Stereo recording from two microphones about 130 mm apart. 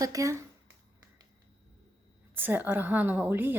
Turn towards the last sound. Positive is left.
turn(degrees=-15)  # may be behind; listen again after turning